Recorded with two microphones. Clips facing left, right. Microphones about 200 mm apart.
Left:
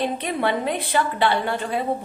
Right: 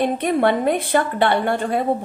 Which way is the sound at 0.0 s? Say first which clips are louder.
Right 6 dB; 50° right (ahead or behind).